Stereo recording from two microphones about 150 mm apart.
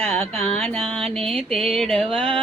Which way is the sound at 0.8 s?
40° right (ahead or behind).